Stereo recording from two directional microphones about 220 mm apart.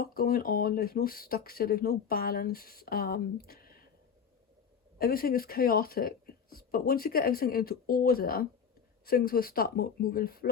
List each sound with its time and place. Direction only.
0.0 s speech: 45° left (ahead or behind)
4.9 s speech: 40° left (ahead or behind)